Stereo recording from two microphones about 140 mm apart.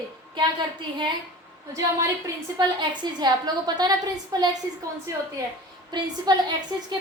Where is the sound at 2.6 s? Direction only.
30° right (ahead or behind).